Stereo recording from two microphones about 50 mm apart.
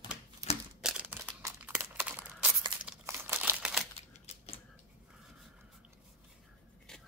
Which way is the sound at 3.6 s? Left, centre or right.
Centre.